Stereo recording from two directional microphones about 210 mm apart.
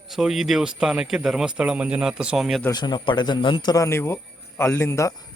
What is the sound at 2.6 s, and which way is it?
Speech, 20° left (ahead or behind).